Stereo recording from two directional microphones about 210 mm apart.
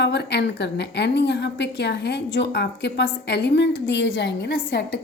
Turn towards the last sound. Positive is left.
turn(degrees=50)  # may be behind; listen again after turning